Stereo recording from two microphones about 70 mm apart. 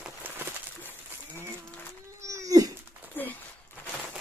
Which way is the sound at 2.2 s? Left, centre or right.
Right.